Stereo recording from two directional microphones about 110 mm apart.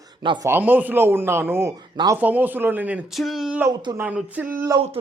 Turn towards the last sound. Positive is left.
turn(degrees=-15)  # may be behind; listen again after turning